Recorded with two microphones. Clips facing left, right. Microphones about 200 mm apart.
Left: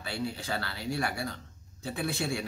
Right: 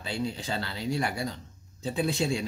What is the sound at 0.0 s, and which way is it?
Speech, 20° right (ahead or behind).